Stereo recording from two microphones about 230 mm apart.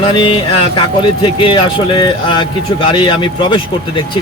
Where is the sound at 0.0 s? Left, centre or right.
Left.